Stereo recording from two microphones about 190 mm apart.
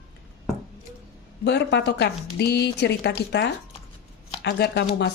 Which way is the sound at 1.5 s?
60° left (ahead or behind).